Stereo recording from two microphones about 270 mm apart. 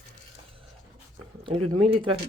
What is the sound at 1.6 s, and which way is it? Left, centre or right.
Speech, right.